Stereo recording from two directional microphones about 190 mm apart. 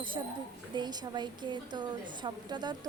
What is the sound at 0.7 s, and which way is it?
A woman's voice, 20° right (ahead or behind).